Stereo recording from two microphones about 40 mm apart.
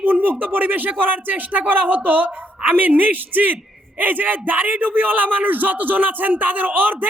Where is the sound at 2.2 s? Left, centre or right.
Right.